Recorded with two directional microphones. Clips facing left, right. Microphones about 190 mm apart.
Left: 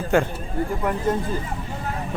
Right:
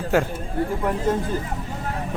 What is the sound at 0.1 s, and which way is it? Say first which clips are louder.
Speech: left 1 dB; 5° right (ahead or behind).